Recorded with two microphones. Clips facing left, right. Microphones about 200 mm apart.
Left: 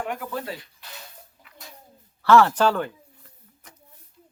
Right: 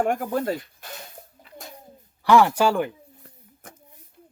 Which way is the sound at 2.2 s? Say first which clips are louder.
Even; 15° right (ahead or behind).